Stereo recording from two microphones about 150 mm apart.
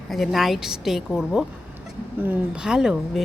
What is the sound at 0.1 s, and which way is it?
A woman's voice, centre (ahead or behind).